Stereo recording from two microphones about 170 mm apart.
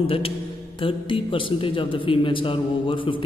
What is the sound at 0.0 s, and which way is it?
A man's voice, 35° left (ahead or behind).